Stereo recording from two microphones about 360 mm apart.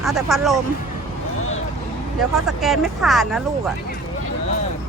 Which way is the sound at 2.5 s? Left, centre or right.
Centre.